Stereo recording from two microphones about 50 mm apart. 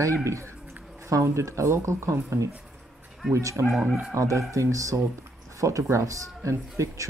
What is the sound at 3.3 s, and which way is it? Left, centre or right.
Speech, right.